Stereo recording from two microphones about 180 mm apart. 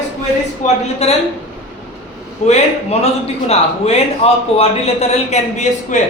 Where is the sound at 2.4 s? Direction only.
40° left (ahead or behind).